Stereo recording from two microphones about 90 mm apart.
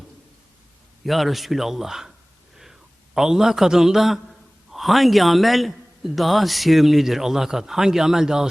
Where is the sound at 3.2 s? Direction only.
5° right (ahead or behind).